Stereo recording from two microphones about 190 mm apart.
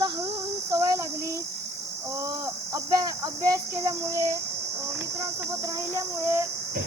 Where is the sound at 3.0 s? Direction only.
20° right (ahead or behind).